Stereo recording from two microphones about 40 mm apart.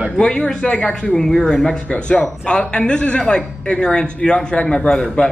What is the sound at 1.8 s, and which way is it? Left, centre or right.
Speech, left.